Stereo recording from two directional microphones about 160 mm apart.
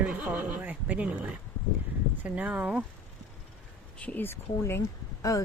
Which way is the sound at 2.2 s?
10° right (ahead or behind).